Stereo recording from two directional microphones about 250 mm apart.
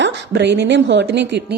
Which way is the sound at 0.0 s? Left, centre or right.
Right.